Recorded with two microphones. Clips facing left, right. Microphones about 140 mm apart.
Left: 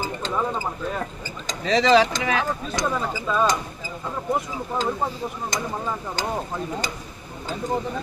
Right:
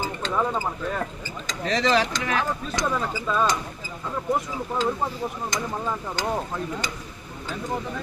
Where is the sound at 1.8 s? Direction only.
90° left.